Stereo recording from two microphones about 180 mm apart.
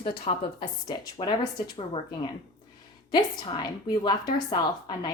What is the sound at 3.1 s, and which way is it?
A woman's voice, 25° left (ahead or behind).